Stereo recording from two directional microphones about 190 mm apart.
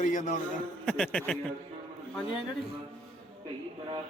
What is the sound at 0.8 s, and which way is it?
Speech, 5° left (ahead or behind).